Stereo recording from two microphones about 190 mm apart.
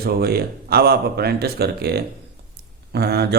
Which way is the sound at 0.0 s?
55° right (ahead or behind).